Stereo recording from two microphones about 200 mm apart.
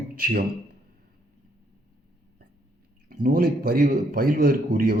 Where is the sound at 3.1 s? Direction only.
45° right (ahead or behind).